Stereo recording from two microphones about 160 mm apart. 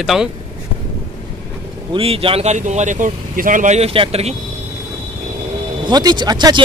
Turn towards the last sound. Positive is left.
turn(degrees=-25)  # may be behind; listen again after turning